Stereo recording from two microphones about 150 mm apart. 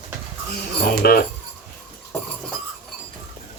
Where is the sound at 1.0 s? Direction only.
90° left.